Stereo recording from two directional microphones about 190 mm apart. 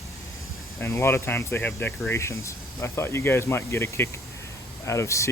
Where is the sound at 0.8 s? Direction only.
15° left (ahead or behind).